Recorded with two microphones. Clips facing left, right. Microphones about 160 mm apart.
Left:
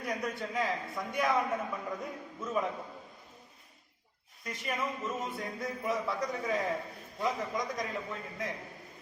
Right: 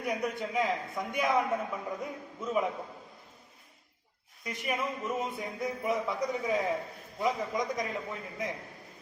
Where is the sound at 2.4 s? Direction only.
15° right (ahead or behind).